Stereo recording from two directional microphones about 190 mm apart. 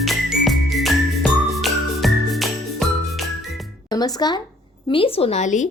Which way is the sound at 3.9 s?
20° left (ahead or behind).